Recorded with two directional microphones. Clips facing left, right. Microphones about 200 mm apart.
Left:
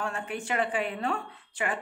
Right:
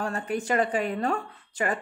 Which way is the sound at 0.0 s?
40° right (ahead or behind).